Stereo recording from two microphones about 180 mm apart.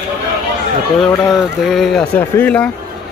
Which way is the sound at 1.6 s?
Centre (ahead or behind).